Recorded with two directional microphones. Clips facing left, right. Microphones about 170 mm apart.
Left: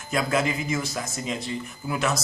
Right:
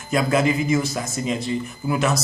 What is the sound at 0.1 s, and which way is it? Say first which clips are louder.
Speech: right 5 dB; 15° right (ahead or behind).